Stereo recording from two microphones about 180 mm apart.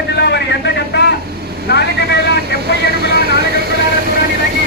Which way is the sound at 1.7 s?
65° left (ahead or behind).